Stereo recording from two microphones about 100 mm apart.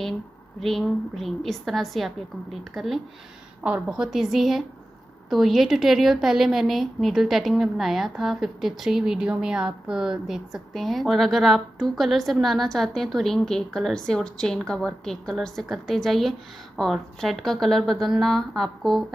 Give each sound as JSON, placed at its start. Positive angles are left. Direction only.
{"t": 0.6, "sound": "a woman's voice", "side_deg": 0}